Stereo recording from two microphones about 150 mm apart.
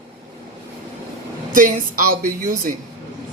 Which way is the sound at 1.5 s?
65° right (ahead or behind).